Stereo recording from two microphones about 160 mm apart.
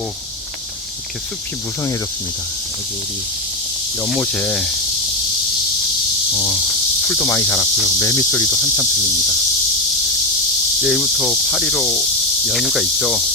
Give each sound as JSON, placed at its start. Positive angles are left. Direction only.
{"t": 4.2, "sound": "cricket", "side_deg": 10}
{"t": 6.3, "sound": "insect", "side_deg": 15}
{"t": 10.8, "sound": "cricket", "side_deg": 0}